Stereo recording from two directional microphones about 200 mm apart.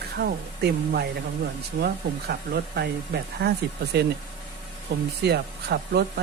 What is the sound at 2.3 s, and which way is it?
Speech, 55° right (ahead or behind).